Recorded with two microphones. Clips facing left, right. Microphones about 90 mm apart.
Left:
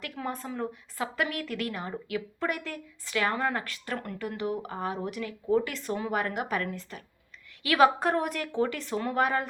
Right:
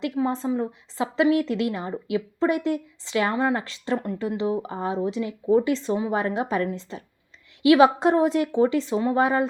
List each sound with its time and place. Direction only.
0.0 s a woman's voice: 25° right (ahead or behind)